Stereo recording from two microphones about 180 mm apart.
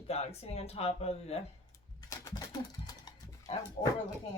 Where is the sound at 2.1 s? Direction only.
20° left (ahead or behind).